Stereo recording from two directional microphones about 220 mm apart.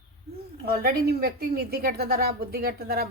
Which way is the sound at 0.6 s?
45° right (ahead or behind).